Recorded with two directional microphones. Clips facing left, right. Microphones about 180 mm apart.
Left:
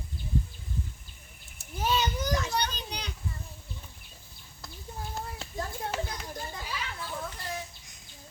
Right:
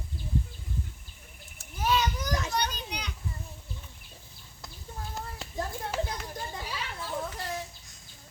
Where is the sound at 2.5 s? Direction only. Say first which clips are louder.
Even; 30° left (ahead or behind).